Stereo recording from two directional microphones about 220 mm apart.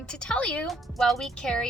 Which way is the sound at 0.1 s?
5° left (ahead or behind).